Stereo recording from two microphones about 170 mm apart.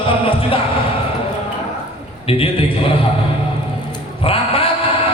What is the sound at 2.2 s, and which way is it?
Speech, 35° left (ahead or behind).